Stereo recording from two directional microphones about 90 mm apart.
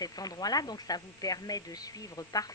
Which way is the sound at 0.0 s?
45° left (ahead or behind).